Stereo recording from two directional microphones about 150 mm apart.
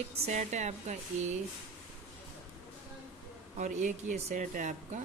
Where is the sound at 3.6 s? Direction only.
55° right (ahead or behind).